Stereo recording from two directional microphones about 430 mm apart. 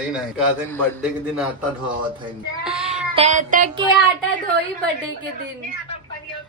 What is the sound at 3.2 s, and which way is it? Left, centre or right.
Child singing, centre.